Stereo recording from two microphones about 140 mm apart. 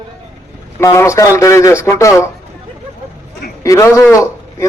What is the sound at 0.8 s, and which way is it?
A man's voice, 20° left (ahead or behind).